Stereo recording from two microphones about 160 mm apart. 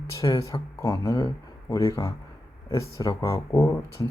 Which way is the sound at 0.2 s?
20° left (ahead or behind).